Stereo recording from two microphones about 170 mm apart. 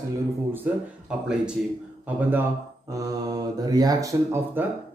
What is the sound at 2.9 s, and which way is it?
Speech, 20° right (ahead or behind).